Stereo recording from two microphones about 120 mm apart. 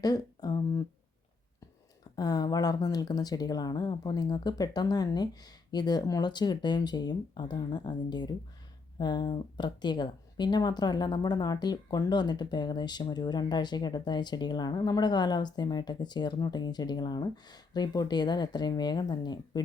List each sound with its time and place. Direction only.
0.0 s speech: 30° left (ahead or behind)
2.1 s speech: 35° left (ahead or behind)